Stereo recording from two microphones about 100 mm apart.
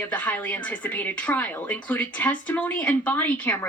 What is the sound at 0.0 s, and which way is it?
A woman's voice, 15° left (ahead or behind).